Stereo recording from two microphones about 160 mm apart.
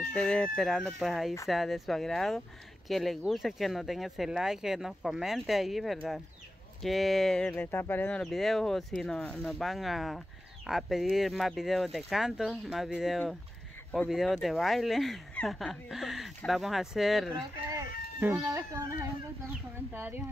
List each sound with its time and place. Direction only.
0.1 s speech: 5° left (ahead or behind)
17.6 s speech: 15° right (ahead or behind)